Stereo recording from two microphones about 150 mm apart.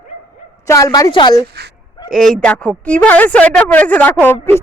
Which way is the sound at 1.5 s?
90° right.